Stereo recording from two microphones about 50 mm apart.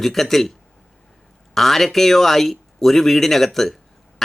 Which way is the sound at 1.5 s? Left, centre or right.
Centre.